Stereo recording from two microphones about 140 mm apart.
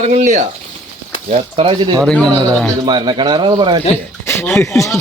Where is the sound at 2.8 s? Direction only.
30° right (ahead or behind).